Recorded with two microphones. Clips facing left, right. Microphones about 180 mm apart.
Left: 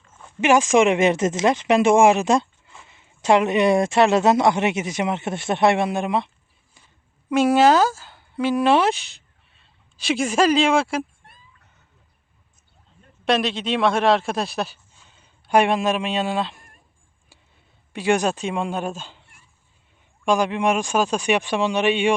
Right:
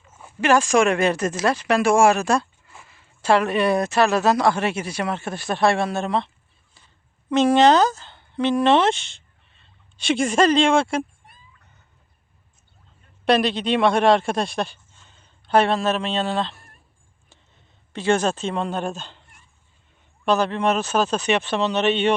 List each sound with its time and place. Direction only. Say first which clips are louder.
0.1 s a sound: left 2 dB; 10° right (ahead or behind)
0.4 s speech: left 1 dB; 15° left (ahead or behind)
13.2 s speech: right 2 dB; centre (ahead or behind)
17.9 s speech: even; 15° left (ahead or behind)
20.2 s speech: even; 10° left (ahead or behind)